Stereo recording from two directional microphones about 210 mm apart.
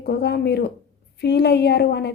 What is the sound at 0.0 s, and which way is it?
A woman's voice, 50° left (ahead or behind).